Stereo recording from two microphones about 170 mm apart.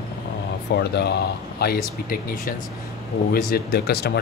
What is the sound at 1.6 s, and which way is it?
Speech, 60° left (ahead or behind).